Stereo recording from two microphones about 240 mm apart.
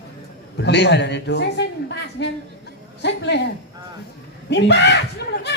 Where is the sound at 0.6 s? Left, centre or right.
Left.